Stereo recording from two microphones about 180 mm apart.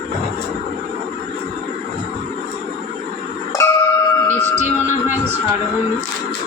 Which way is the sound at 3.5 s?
15° left (ahead or behind).